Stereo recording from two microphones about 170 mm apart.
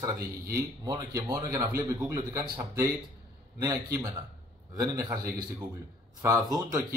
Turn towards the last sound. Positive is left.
turn(degrees=-20)  # may be behind; listen again after turning